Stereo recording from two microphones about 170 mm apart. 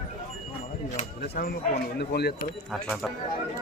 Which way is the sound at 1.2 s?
60° left (ahead or behind).